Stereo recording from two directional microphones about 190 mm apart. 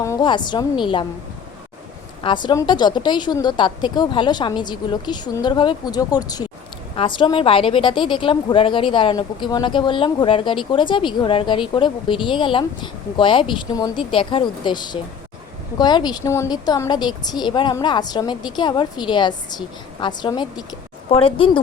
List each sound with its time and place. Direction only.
0.0 s speech: 20° left (ahead or behind)
2.2 s speech: 25° left (ahead or behind)